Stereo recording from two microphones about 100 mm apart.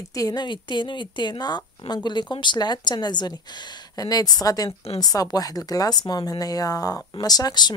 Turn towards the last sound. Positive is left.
turn(degrees=45)  # may be behind; listen again after turning